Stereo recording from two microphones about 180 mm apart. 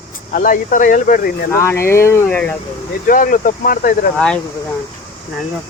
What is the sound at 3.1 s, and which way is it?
Speech, 50° left (ahead or behind).